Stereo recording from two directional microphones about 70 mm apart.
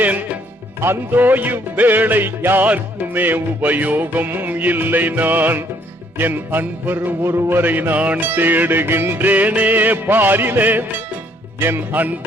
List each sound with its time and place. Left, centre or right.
0.0 s music: right